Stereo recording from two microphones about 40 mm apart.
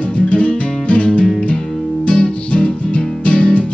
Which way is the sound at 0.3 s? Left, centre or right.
Left.